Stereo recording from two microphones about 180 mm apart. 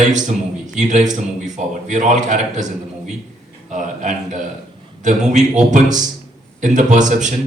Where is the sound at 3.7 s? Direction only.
45° right (ahead or behind).